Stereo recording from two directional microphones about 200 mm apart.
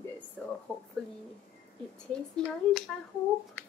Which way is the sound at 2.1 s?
5° left (ahead or behind).